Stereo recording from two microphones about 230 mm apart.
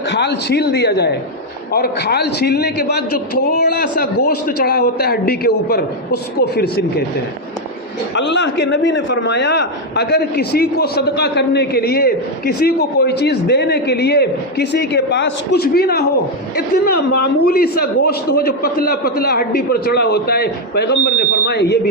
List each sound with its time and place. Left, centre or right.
0.1 s a man's voice: left
8.1 s a man's voice: left